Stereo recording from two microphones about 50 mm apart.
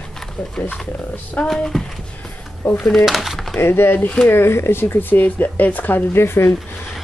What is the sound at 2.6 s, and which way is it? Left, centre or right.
Speech, left.